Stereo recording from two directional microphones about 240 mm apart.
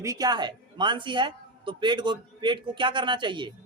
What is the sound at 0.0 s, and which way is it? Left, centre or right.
A man's voice, centre.